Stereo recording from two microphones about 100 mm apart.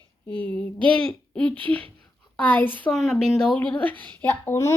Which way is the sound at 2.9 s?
Centre (ahead or behind).